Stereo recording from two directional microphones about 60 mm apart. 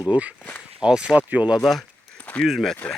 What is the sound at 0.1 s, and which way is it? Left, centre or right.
Speech, right.